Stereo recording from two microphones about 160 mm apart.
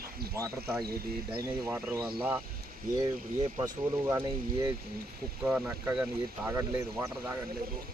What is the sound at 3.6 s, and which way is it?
Speech, 20° right (ahead or behind).